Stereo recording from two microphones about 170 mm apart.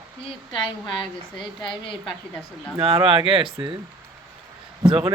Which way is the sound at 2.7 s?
35° right (ahead or behind).